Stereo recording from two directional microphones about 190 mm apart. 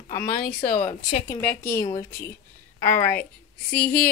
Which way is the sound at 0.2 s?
45° left (ahead or behind).